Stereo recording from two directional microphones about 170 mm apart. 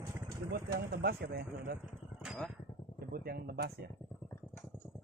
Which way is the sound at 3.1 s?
65° right (ahead or behind).